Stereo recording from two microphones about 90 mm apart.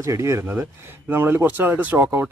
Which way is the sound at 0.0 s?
30° right (ahead or behind).